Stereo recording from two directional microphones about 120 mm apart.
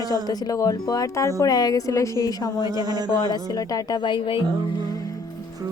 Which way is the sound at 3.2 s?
35° left (ahead or behind).